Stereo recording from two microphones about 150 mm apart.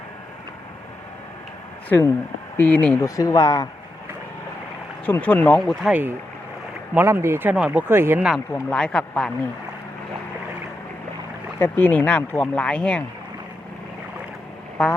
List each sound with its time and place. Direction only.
1.9 s speech: 20° left (ahead or behind)
3.0 s speech: 20° left (ahead or behind)
5.0 s speech: 10° left (ahead or behind)
5.9 s speech: 15° right (ahead or behind)
8.7 s speech: 5° left (ahead or behind)
11.6 s speech: 10° left (ahead or behind)